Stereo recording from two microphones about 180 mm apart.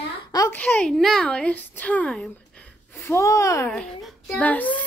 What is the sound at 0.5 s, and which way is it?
Speech, 10° left (ahead or behind).